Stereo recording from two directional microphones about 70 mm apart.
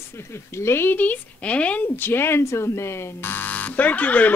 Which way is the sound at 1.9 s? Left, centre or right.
Left.